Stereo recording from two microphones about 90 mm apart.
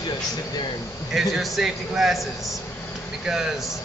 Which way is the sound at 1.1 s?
Centre (ahead or behind).